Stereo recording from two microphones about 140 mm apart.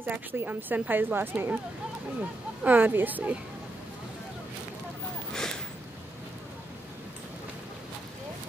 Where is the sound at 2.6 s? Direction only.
15° right (ahead or behind).